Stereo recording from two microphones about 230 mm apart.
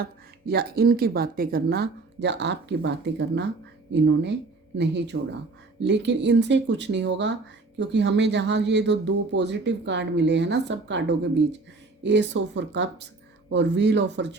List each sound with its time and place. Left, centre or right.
0.0 s speech: right